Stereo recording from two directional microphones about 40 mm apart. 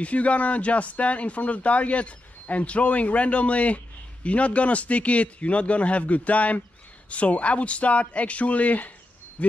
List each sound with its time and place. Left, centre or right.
0.0 s speech: left